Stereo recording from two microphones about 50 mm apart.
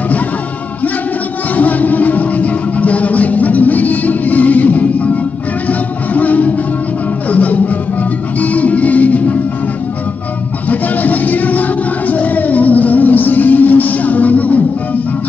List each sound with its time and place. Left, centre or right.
1.5 s music: left
10.7 s music: left